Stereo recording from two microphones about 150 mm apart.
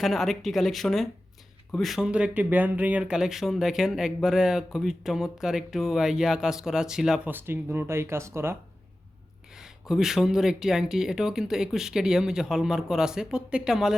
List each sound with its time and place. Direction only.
0.0 s speech: centre (ahead or behind)
7.3 s speech: 15° right (ahead or behind)
9.5 s speech: 5° right (ahead or behind)